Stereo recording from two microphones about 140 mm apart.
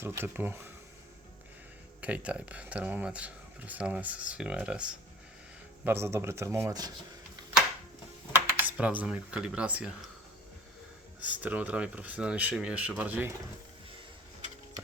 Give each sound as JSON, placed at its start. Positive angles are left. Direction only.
{"t": 0.0, "sound": "speech", "side_deg": -15}
{"t": 2.0, "sound": "speech", "side_deg": -10}
{"t": 5.8, "sound": "speech", "side_deg": -15}
{"t": 8.3, "sound": "speech", "side_deg": -15}
{"t": 11.2, "sound": "speech", "side_deg": -10}